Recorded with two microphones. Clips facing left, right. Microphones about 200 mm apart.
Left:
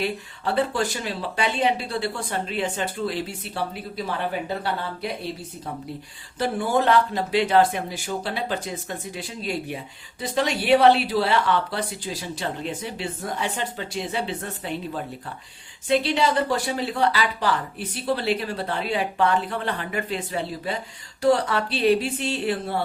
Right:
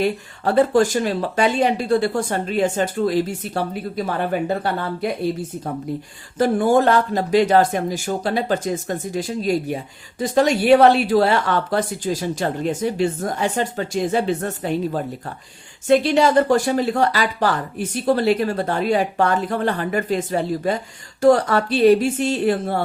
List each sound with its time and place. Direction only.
0.0 s speech: 45° right (ahead or behind)
6.4 s speech: 45° right (ahead or behind)